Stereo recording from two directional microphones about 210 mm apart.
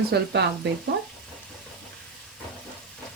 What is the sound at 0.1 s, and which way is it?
Speech, 55° right (ahead or behind).